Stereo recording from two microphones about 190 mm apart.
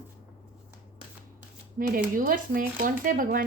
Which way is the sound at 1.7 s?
50° right (ahead or behind).